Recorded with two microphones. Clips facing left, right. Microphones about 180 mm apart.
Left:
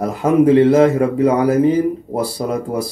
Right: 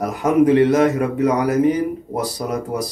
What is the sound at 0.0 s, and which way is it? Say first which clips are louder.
A man's voice: left 2 dB; 25° left (ahead or behind).